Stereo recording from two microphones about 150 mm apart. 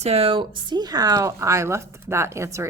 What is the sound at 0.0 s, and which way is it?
Speech, 40° right (ahead or behind).